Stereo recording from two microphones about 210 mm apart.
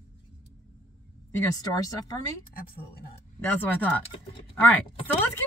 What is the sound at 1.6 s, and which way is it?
Speech, 20° left (ahead or behind).